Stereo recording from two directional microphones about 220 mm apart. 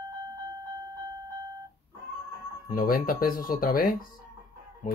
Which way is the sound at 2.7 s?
40° left (ahead or behind).